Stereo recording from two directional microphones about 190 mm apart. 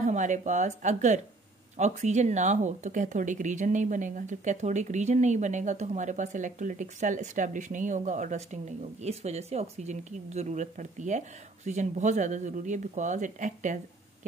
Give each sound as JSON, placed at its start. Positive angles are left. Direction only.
{"t": 0.0, "sound": "speech", "side_deg": -40}